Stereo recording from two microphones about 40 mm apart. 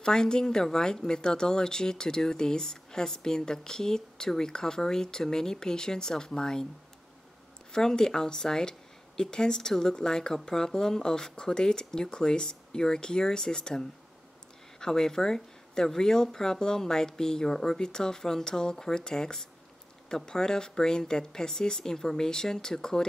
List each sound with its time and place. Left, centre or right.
0.0 s speech: centre
7.7 s speech: centre